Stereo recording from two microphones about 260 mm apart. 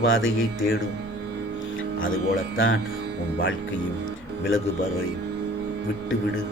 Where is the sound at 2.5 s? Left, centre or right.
Left.